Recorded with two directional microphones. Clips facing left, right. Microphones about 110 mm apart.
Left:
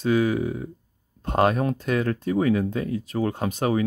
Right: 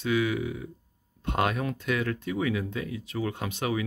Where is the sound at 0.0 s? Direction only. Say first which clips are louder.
Left 5 dB; 40° left (ahead or behind).